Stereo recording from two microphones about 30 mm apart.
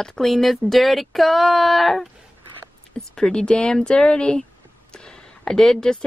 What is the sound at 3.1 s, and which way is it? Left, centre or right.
Speech, left.